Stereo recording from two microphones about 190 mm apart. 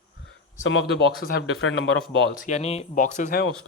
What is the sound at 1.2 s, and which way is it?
Speech, 55° left (ahead or behind).